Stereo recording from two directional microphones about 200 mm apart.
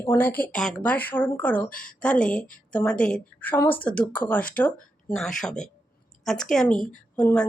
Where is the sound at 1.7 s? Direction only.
45° left (ahead or behind).